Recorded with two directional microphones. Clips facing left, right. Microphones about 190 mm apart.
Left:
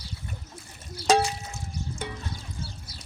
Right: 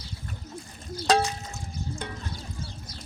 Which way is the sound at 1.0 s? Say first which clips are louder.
Left 1 dB; 10° left (ahead or behind).